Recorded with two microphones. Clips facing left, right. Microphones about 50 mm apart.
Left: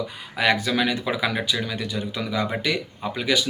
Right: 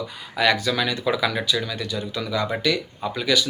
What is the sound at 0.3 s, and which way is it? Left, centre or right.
Speech, left.